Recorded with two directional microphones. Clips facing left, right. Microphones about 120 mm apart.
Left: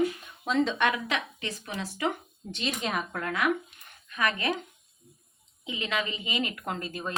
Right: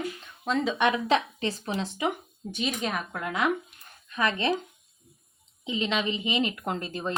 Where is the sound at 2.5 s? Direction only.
5° right (ahead or behind).